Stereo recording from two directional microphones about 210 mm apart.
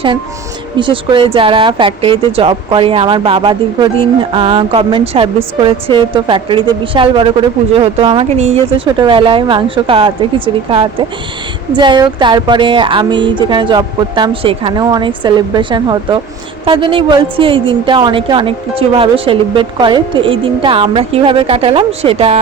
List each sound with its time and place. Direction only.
0.8 s speech: 25° right (ahead or behind)